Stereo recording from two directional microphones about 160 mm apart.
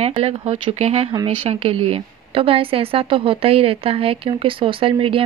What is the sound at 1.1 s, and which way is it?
Speech, 30° right (ahead or behind).